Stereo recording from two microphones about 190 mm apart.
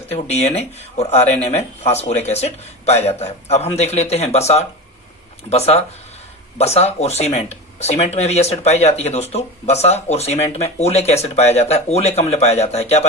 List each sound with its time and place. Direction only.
0.1 s speech: 35° left (ahead or behind)